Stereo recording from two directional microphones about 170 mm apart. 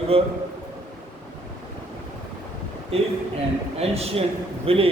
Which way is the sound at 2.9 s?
35° right (ahead or behind).